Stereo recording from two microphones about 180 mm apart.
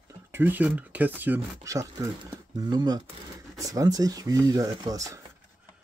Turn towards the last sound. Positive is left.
turn(degrees=-20)  # may be behind; listen again after turning